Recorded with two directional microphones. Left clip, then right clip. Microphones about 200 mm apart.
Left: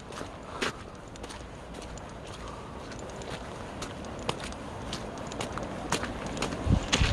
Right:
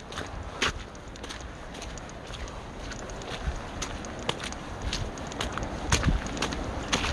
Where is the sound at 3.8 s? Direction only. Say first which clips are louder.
Right 3 dB; 15° left (ahead or behind).